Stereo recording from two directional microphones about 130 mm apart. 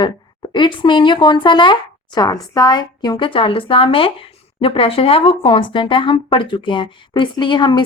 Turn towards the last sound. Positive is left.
turn(degrees=40)  # may be behind; listen again after turning